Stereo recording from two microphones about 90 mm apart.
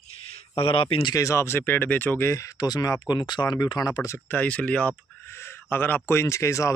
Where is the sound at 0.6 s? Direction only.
90° left.